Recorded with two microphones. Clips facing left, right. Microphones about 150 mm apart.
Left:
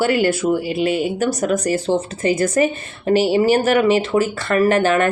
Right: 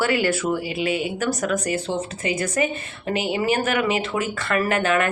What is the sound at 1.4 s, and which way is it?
Speech, 35° left (ahead or behind).